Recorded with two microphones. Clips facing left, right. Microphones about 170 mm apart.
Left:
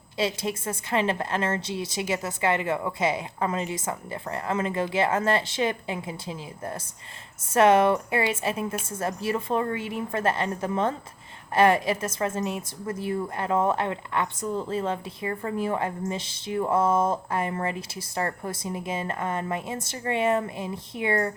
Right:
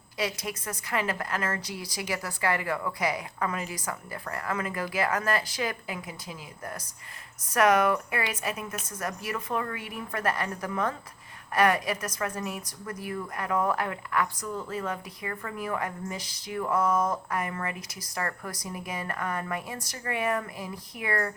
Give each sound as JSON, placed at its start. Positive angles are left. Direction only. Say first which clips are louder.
{"t": 0.2, "sound": "a woman's voice", "louder": "left 5 dB", "side_deg": 25}